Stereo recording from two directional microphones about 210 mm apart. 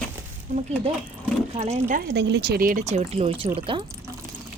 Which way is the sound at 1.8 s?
50° right (ahead or behind).